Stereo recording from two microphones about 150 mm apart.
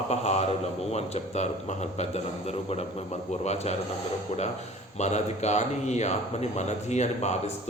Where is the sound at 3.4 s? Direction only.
45° left (ahead or behind).